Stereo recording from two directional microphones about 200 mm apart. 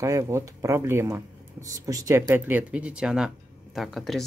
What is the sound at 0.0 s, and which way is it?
Speech, 15° right (ahead or behind).